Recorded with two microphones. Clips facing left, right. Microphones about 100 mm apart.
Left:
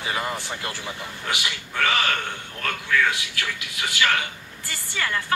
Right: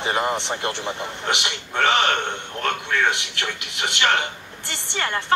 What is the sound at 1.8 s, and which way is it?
A woman's voice, 25° right (ahead or behind).